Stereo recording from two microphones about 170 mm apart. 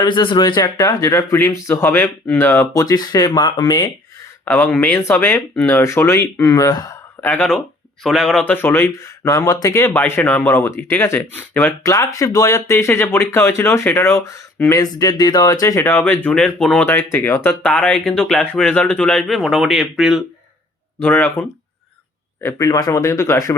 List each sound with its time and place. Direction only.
0.0 s speech: 30° left (ahead or behind)
4.4 s speech: 10° left (ahead or behind)
7.3 s speech: 5° left (ahead or behind)
21.0 s speech: 10° left (ahead or behind)
22.4 s speech: 20° left (ahead or behind)